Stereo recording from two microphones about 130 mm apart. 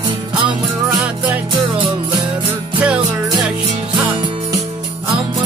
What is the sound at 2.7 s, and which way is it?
Music, 10° right (ahead or behind).